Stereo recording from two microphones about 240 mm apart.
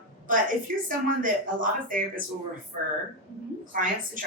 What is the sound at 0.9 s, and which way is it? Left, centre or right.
Speech, right.